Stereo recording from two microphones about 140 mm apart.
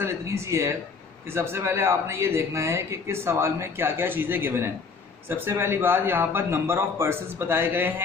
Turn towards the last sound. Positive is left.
turn(degrees=-15)  # may be behind; listen again after turning